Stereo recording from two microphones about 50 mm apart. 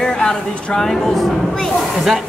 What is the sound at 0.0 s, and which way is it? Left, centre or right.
A child's voice, centre.